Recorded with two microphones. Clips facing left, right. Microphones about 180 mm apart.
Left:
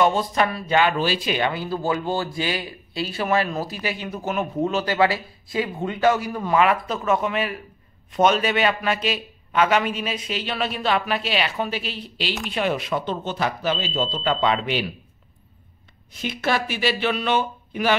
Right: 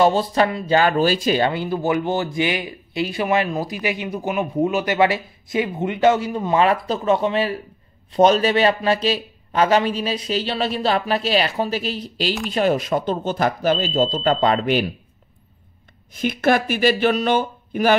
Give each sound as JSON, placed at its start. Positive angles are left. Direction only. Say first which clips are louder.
{"t": 0.0, "sound": "speech", "louder": "right 3 dB", "side_deg": -35}
{"t": 0.5, "sound": "speech", "louder": "right 5 dB", "side_deg": -20}
{"t": 0.7, "sound": "speech", "louder": "right 3 dB", "side_deg": -45}
{"t": 1.6, "sound": "speech", "louder": "right 4 dB", "side_deg": -20}
{"t": 16.1, "sound": "speech", "louder": "right 6 dB", "side_deg": -50}